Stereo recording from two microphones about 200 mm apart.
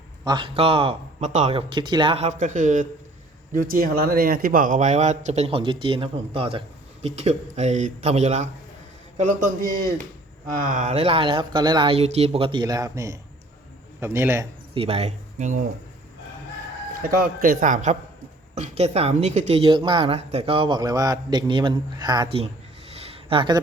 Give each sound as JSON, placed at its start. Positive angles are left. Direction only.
{"t": 0.3, "sound": "a man's voice", "side_deg": -25}
{"t": 14.7, "sound": "speech", "side_deg": -30}
{"t": 17.0, "sound": "speech", "side_deg": -45}
{"t": 23.0, "sound": "a sound", "side_deg": -30}